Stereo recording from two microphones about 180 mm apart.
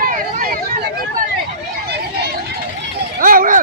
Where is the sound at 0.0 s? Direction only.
55° right (ahead or behind).